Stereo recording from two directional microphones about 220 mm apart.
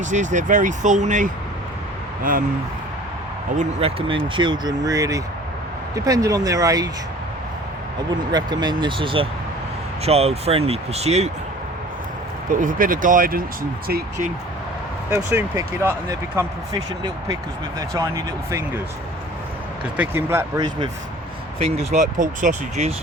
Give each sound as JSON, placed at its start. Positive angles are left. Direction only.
{"t": 0.0, "sound": "speech", "side_deg": -35}
{"t": 3.6, "sound": "speech", "side_deg": -25}
{"t": 8.3, "sound": "speech", "side_deg": -20}
{"t": 12.5, "sound": "speech", "side_deg": -40}
{"t": 15.1, "sound": "speech", "side_deg": -10}
{"t": 20.0, "sound": "speech", "side_deg": -10}
{"t": 21.6, "sound": "speech", "side_deg": -30}